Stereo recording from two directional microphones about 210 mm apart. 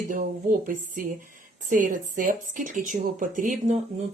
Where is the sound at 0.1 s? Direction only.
40° right (ahead or behind).